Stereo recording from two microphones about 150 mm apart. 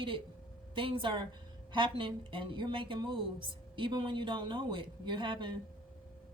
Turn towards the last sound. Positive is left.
turn(degrees=-35)  # may be behind; listen again after turning